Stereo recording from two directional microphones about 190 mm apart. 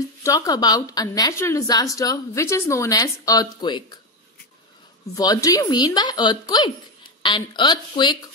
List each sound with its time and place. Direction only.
0.2 s a woman's voice: 15° left (ahead or behind)
5.1 s a woman's voice: 20° left (ahead or behind)